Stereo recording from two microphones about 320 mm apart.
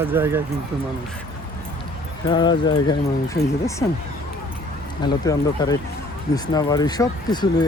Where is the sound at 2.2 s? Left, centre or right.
Centre.